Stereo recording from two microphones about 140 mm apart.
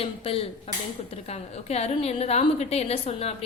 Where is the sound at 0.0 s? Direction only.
40° left (ahead or behind).